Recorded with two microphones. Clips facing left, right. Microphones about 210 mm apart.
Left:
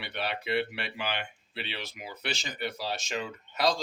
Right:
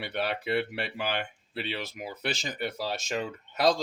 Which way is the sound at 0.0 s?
45° right (ahead or behind).